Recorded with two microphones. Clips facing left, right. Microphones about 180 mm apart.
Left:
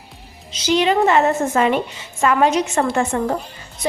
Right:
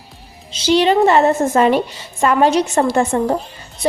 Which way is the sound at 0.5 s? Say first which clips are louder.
Right 3 dB; 30° right (ahead or behind).